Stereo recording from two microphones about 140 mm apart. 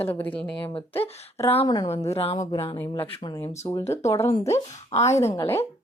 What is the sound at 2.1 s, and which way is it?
Speech, 45° left (ahead or behind).